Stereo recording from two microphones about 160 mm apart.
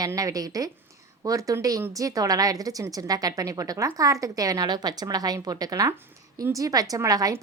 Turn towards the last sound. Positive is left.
turn(degrees=-20)  # may be behind; listen again after turning